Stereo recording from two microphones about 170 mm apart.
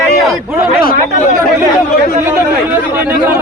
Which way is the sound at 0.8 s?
45° left (ahead or behind).